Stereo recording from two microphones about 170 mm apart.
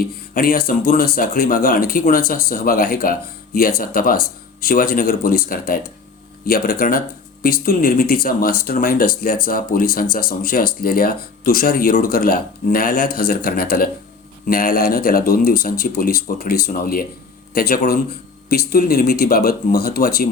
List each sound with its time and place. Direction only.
0.0 s speech: 60° left (ahead or behind)